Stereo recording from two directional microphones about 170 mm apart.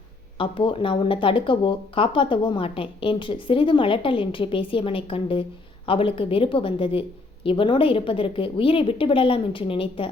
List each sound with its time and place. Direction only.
0.3 s speech: 30° left (ahead or behind)